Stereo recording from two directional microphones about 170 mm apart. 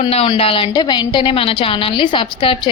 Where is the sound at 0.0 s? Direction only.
35° left (ahead or behind).